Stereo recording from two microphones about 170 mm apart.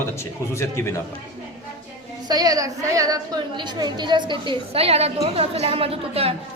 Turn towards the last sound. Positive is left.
turn(degrees=-35)  # may be behind; listen again after turning